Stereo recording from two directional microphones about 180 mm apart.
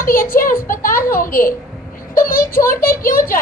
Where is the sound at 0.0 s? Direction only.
50° left (ahead or behind).